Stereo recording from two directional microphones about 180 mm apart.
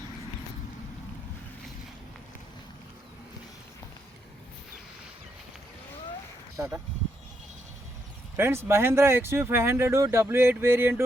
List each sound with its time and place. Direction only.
6.6 s speech: 15° right (ahead or behind)
8.4 s speech: 15° right (ahead or behind)